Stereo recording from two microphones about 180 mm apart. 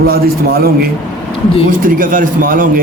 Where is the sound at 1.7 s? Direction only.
50° right (ahead or behind).